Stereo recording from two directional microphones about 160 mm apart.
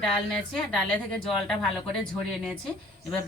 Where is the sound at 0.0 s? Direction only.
5° left (ahead or behind).